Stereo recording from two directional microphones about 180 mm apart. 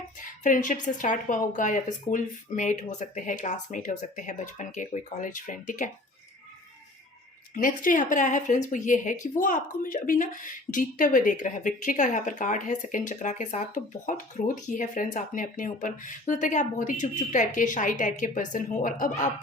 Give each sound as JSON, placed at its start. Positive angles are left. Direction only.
{"t": 0.2, "sound": "speech", "side_deg": 45}
{"t": 7.5, "sound": "speech", "side_deg": 50}